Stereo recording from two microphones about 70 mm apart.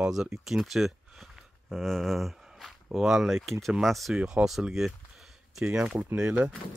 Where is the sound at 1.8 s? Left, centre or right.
Centre.